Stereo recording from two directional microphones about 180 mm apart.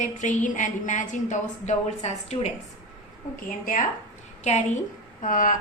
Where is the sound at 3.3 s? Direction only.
50° left (ahead or behind).